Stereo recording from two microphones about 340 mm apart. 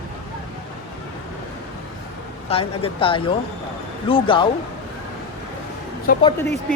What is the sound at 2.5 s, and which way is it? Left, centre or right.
Speech, centre.